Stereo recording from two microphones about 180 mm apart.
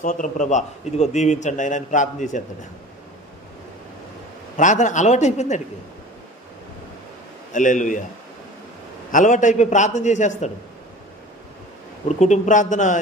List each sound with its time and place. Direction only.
0.0 s a man's voice: 45° left (ahead or behind)
4.6 s a man's voice: 45° left (ahead or behind)
7.5 s a man's voice: 45° left (ahead or behind)
9.1 s a man's voice: 45° left (ahead or behind)
12.2 s a man's voice: 45° left (ahead or behind)